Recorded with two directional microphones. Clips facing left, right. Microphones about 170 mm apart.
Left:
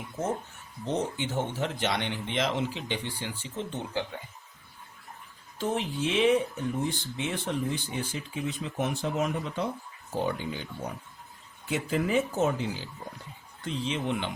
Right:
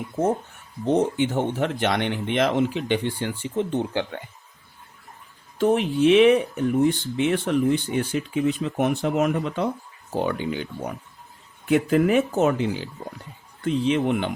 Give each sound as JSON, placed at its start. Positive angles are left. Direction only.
{"t": 0.9, "sound": "speech", "side_deg": -60}
{"t": 5.5, "sound": "speech", "side_deg": -65}